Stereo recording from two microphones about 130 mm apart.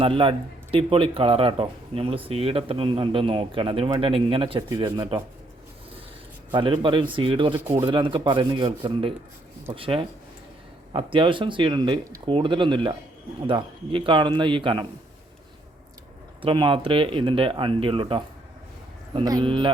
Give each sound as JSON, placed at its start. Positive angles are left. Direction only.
{"t": 0.0, "sound": "speech", "side_deg": -45}
{"t": 6.5, "sound": "speech", "side_deg": -40}
{"t": 16.4, "sound": "speech", "side_deg": -40}
{"t": 19.2, "sound": "speech", "side_deg": -35}